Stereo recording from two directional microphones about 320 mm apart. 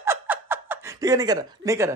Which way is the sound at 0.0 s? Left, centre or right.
Centre.